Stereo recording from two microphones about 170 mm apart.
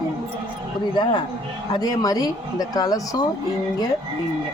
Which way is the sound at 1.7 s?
25° left (ahead or behind).